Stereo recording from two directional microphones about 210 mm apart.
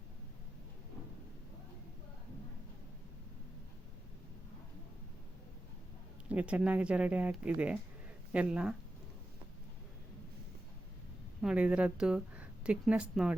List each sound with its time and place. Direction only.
6.2 s a woman's voice: 5° right (ahead or behind)
11.4 s a woman's voice: 5° right (ahead or behind)